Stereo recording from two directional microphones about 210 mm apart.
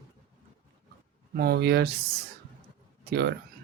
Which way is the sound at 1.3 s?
50° right (ahead or behind).